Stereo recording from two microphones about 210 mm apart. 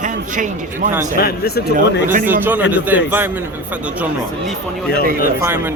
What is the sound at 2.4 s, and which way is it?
Speech, 10° right (ahead or behind).